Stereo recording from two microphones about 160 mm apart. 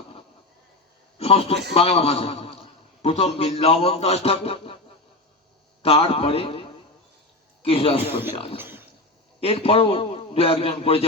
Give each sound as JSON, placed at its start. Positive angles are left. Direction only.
{"t": 1.2, "sound": "a man's voice", "side_deg": 35}
{"t": 5.8, "sound": "a man's voice", "side_deg": 35}
{"t": 8.5, "sound": "speech", "side_deg": -15}
{"t": 9.4, "sound": "a man's voice", "side_deg": 35}